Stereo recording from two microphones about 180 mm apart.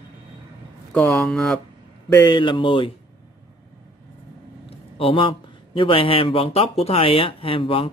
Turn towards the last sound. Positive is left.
turn(degrees=30)  # may be behind; listen again after turning